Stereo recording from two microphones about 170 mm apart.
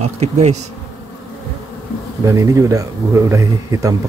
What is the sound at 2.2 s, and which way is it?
Speech, 20° right (ahead or behind).